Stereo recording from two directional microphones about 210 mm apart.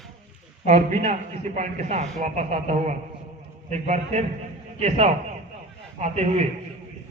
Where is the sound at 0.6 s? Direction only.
35° right (ahead or behind).